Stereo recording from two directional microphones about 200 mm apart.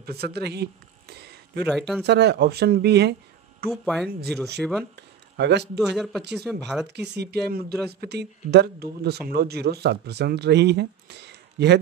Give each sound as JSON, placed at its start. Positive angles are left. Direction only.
{"t": 0.0, "sound": "speech", "side_deg": -50}
{"t": 1.6, "sound": "speech", "side_deg": 0}
{"t": 2.0, "sound": "speech", "side_deg": -55}
{"t": 3.7, "sound": "speech", "side_deg": 0}
{"t": 5.4, "sound": "speech", "side_deg": -60}
{"t": 5.8, "sound": "speech", "side_deg": 0}
{"t": 6.9, "sound": "speech", "side_deg": -55}